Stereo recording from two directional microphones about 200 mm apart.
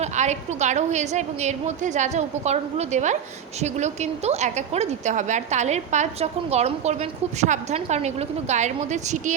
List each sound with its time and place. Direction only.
0.0 s a woman's voice: 35° right (ahead or behind)